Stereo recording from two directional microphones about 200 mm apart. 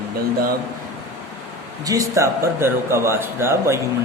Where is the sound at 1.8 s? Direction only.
15° right (ahead or behind).